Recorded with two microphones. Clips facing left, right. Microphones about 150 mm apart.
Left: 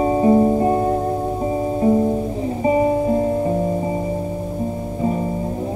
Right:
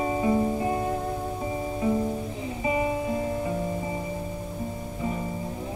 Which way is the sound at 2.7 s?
40° left (ahead or behind).